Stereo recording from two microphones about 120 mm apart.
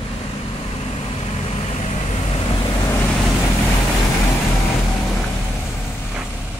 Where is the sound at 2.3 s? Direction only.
40° left (ahead or behind).